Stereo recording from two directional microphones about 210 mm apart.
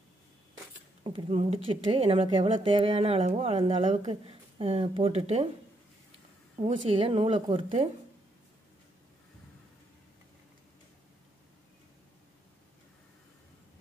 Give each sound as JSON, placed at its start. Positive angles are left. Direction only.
{"t": 1.0, "sound": "speech", "side_deg": -25}
{"t": 6.7, "sound": "speech", "side_deg": -25}